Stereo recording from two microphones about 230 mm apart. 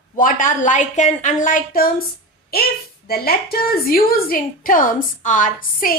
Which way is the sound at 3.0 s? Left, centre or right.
Left.